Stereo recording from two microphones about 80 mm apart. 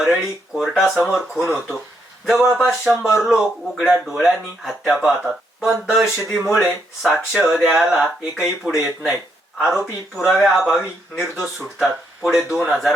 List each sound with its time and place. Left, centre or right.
0.0 s speech: centre
2.6 s speech: centre